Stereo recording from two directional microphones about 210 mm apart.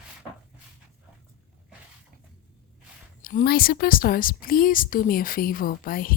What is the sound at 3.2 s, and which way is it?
A woman's voice, 45° left (ahead or behind).